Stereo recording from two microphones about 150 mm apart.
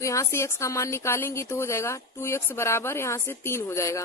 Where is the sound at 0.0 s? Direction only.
20° left (ahead or behind).